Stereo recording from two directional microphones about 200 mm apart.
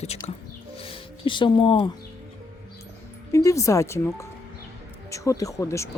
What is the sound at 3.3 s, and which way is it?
Speech, 15° left (ahead or behind).